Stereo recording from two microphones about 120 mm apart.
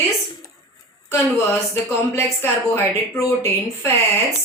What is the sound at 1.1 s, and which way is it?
A woman's voice, 20° left (ahead or behind).